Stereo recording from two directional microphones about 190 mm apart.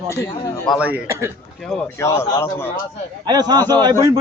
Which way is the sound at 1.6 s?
5° left (ahead or behind).